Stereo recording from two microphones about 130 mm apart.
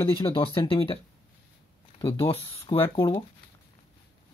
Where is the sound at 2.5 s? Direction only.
45° left (ahead or behind).